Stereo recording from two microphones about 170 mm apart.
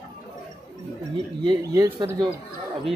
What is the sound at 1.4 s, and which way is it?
Speech, 25° right (ahead or behind).